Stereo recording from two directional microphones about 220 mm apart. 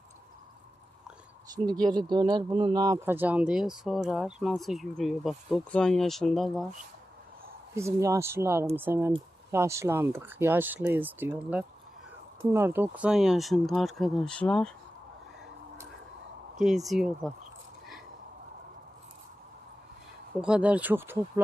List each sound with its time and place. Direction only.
1.5 s speech: 20° right (ahead or behind); by 6.7 s centre (ahead or behind)
7.8 s speech: 15° right (ahead or behind); by 14.7 s 5° left (ahead or behind)
16.6 s speech: centre (ahead or behind)
20.4 s speech: 5° right (ahead or behind)